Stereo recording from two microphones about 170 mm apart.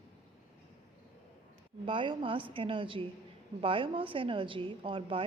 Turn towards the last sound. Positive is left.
turn(degrees=-30)  # may be behind; listen again after turning